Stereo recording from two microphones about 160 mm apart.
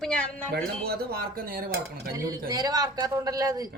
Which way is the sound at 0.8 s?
75° right (ahead or behind).